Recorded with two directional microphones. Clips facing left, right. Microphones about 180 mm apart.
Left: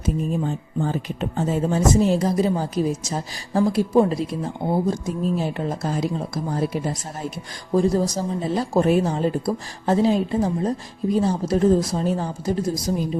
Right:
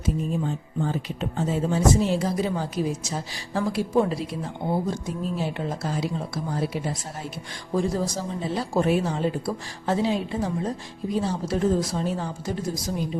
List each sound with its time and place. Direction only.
0.0 s a woman's voice: 45° left (ahead or behind)